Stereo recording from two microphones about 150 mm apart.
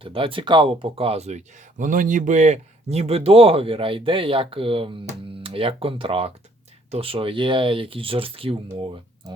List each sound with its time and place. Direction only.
0.0 s speech: 35° right (ahead or behind)
1.8 s speech: 60° right (ahead or behind); by 9.0 s 40° right (ahead or behind)